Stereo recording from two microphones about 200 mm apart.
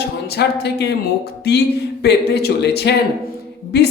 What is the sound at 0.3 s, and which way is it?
Speech, 55° left (ahead or behind).